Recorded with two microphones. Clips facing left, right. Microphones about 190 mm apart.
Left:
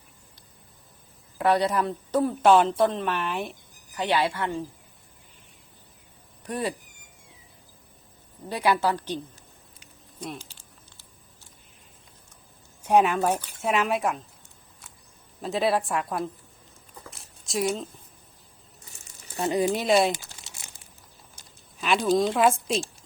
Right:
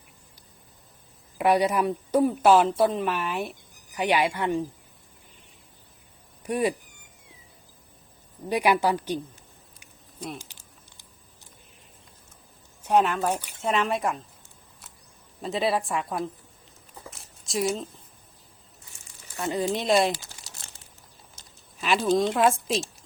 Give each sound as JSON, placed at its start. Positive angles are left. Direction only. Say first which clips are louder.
{"t": 1.4, "sound": "a woman's voice", "louder": "right 1 dB", "side_deg": -10}
{"t": 6.4, "sound": "speech", "louder": "right 4 dB", "side_deg": -15}
{"t": 8.4, "sound": "a woman's voice", "louder": "right 2 dB", "side_deg": -15}
{"t": 10.3, "sound": "a sound", "louder": "even", "side_deg": -15}
{"t": 12.8, "sound": "speech", "louder": "left 2 dB", "side_deg": 10}
{"t": 15.4, "sound": "speech", "louder": "left 1 dB", "side_deg": 0}
{"t": 17.1, "sound": "a sound", "louder": "even", "side_deg": 0}
{"t": 19.4, "sound": "speech", "louder": "left 3 dB", "side_deg": 15}
{"t": 21.8, "sound": "speech", "louder": "even", "side_deg": 0}